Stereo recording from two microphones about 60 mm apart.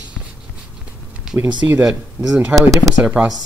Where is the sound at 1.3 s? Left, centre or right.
Centre.